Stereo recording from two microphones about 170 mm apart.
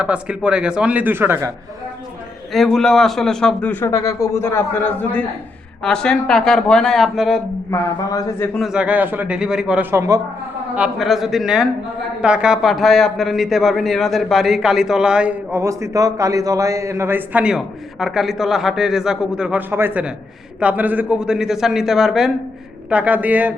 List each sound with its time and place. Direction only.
0.0 s a man's voice: 5° right (ahead or behind)
2.5 s a man's voice: centre (ahead or behind)
7.7 s a man's voice: 20° left (ahead or behind)
8.5 s a man's voice: 5° right (ahead or behind)
9.9 s a man's voice: 15° right (ahead or behind)
10.8 s a man's voice: 5° right (ahead or behind)
15.6 s a man's voice: 20° right (ahead or behind)